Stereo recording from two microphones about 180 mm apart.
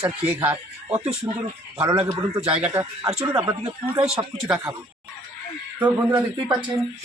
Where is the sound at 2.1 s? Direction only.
30° right (ahead or behind).